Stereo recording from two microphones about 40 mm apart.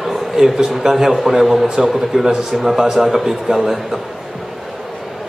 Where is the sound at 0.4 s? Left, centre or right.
Centre.